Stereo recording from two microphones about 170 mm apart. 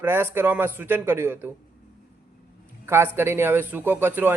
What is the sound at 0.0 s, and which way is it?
A man's voice, 15° right (ahead or behind).